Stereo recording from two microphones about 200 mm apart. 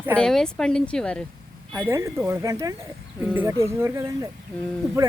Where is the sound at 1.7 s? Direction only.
15° right (ahead or behind).